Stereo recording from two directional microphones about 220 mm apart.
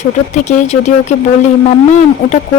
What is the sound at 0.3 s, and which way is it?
Speech, 35° left (ahead or behind).